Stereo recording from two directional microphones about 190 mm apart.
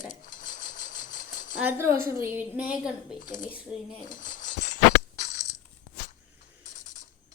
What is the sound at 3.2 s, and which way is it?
Speech, 45° left (ahead or behind).